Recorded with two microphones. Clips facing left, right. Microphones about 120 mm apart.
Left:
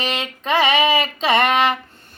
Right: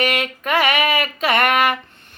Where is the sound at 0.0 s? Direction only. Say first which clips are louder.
Right 4 dB; 25° left (ahead or behind).